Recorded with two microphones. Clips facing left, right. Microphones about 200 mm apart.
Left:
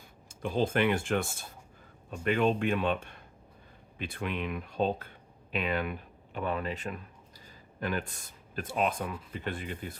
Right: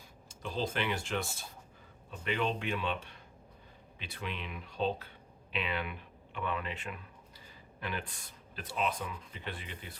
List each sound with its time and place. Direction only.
0.3 s speech: 55° left (ahead or behind)